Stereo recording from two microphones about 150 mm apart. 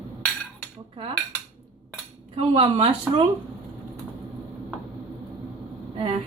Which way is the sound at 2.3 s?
40° right (ahead or behind).